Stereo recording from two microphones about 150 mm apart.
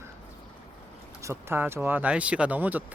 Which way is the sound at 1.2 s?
15° right (ahead or behind).